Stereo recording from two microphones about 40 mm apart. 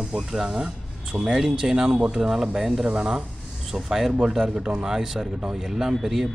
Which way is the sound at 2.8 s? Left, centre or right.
Centre.